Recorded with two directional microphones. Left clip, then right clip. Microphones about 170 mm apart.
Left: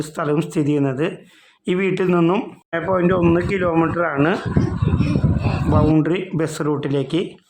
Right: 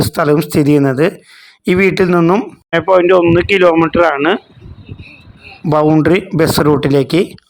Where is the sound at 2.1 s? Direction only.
15° right (ahead or behind).